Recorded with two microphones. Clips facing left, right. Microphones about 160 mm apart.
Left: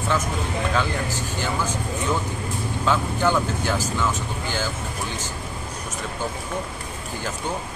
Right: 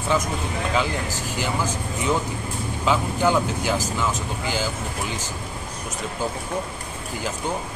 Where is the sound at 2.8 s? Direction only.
10° right (ahead or behind).